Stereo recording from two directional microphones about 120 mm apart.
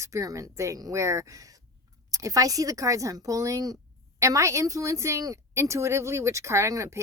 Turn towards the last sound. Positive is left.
turn(degrees=-25)  # may be behind; listen again after turning